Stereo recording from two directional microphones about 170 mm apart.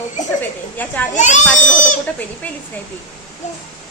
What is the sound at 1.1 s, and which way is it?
Speech, 45° left (ahead or behind).